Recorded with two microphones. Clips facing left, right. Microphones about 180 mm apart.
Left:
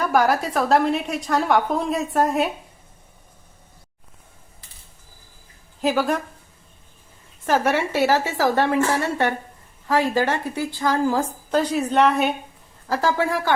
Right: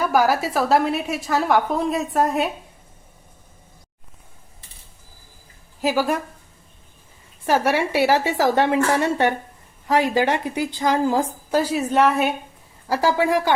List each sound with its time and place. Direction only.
0.0 s a woman's voice: 5° right (ahead or behind)
5.8 s a woman's voice: 5° right (ahead or behind)
7.4 s a woman's voice: 10° right (ahead or behind)
12.9 s a woman's voice: 10° right (ahead or behind)